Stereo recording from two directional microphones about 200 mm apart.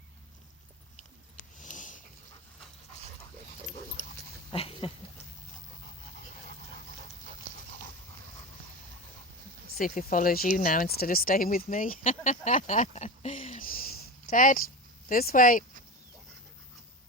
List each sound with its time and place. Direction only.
1.5 s a sound: 40° left (ahead or behind)
4.5 s goat: 30° left (ahead or behind)
9.7 s speech: 45° left (ahead or behind)